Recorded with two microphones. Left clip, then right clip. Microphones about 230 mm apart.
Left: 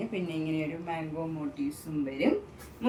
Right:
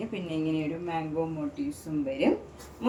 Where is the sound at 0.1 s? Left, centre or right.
Centre.